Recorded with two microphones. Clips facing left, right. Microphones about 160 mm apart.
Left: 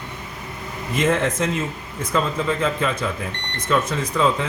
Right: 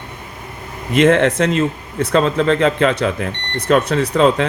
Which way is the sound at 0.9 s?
70° right (ahead or behind).